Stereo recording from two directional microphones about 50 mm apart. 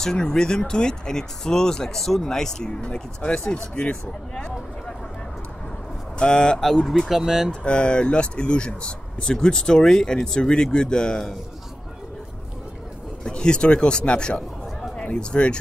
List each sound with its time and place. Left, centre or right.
0.0 s speech: centre
3.3 s speech: centre
3.7 s speech: left
6.1 s speech: centre
7.1 s speech: centre
7.6 s speech: left
13.2 s speech: centre